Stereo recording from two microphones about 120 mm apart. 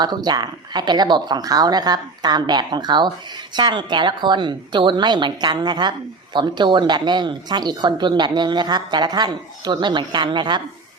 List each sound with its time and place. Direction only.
0.0 s speech: 35° right (ahead or behind)